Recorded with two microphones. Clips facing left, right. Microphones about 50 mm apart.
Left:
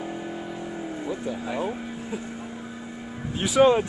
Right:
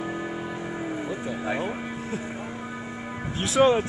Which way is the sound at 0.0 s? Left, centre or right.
Right.